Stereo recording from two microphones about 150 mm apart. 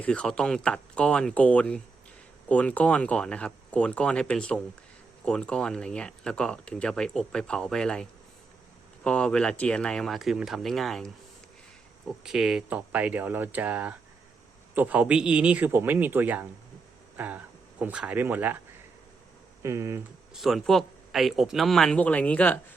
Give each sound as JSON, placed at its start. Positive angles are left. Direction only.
{"t": 0.0, "sound": "speech", "side_deg": 5}
{"t": 9.0, "sound": "speech", "side_deg": 5}
{"t": 19.6, "sound": "speech", "side_deg": -20}
{"t": 20.3, "sound": "speech", "side_deg": 0}